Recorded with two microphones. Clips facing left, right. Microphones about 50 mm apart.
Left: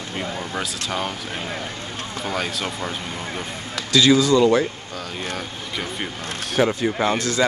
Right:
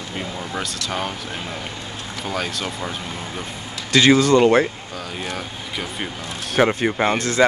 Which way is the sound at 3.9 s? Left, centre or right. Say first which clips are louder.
Right 2 dB; right.